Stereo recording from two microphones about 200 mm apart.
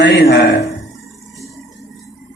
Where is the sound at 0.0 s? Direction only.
55° left (ahead or behind).